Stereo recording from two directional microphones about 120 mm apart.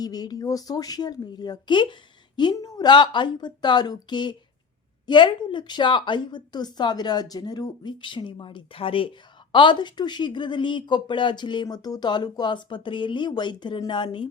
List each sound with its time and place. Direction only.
0.0 s speech: 35° left (ahead or behind)